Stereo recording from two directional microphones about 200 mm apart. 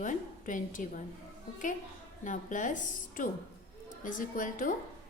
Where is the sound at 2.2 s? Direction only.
40° left (ahead or behind).